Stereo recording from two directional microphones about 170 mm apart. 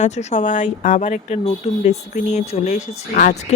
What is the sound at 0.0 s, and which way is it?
Speech, 40° left (ahead or behind).